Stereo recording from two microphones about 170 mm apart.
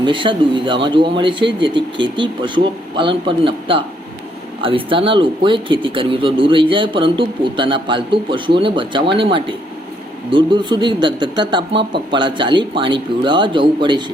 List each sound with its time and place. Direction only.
0.0 s speech: 30° right (ahead or behind)